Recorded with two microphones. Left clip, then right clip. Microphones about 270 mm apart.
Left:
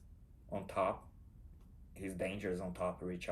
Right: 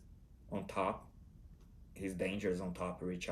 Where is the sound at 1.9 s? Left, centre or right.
Centre.